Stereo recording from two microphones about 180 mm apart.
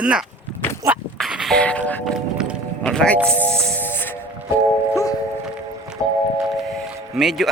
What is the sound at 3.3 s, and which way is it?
Music, 5° left (ahead or behind).